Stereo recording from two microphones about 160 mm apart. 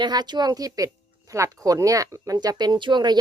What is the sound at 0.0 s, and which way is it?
A woman's voice, 25° right (ahead or behind).